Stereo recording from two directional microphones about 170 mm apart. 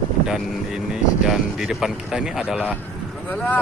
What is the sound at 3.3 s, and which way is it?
Speech, 10° left (ahead or behind).